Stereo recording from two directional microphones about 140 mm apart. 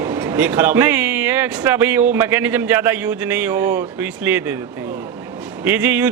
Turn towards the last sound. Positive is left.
turn(degrees=-10)  # may be behind; listen again after turning